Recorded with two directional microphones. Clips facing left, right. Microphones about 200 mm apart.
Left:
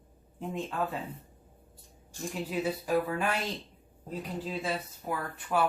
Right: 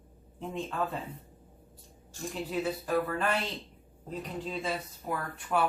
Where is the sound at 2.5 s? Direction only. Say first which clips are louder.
Left 1 dB; 10° left (ahead or behind).